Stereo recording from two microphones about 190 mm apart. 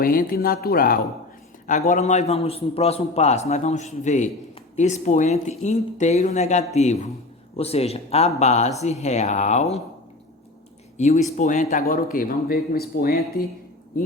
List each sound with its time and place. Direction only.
0.0 s a man's voice: 50° left (ahead or behind)
10.9 s speech: 40° left (ahead or behind); by 13.1 s 55° left (ahead or behind)